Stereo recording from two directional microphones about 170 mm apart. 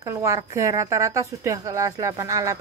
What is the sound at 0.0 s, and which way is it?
A woman's voice, 20° right (ahead or behind).